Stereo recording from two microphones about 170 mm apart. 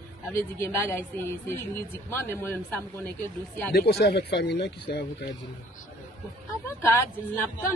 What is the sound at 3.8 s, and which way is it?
Speech, 70° left (ahead or behind).